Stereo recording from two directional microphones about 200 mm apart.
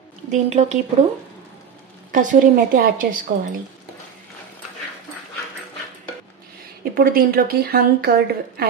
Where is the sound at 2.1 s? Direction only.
40° right (ahead or behind).